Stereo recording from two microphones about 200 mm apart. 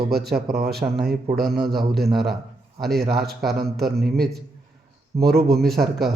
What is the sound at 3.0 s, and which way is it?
A man's voice, 50° right (ahead or behind).